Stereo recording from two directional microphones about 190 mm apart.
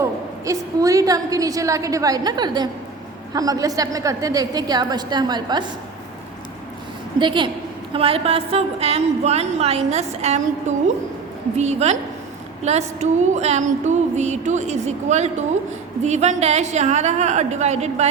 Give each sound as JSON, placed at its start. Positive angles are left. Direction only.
{"t": 0.0, "sound": "a woman's voice", "side_deg": -15}
{"t": 7.2, "sound": "a woman's voice", "side_deg": -25}